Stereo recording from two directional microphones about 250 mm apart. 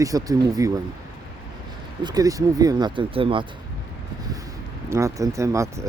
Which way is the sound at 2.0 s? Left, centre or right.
Centre.